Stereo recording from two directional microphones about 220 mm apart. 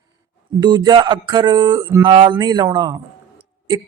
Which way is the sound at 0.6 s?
20° right (ahead or behind).